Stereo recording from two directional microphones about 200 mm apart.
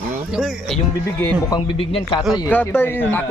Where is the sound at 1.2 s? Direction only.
10° left (ahead or behind).